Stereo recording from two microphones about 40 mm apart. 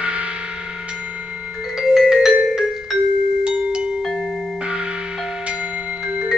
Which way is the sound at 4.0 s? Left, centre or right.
Centre.